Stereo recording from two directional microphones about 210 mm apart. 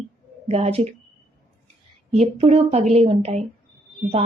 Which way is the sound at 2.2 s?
30° right (ahead or behind).